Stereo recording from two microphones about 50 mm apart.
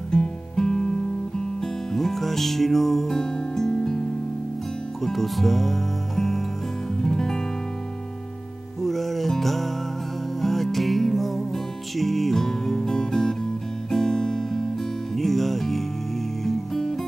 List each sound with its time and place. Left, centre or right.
0.1 s music: centre
5.0 s speech: centre
7.0 s music: centre
8.8 s music: centre
13.8 s guitar: centre
15.1 s music: centre